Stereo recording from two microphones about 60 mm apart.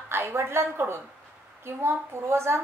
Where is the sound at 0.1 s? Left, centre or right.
Right.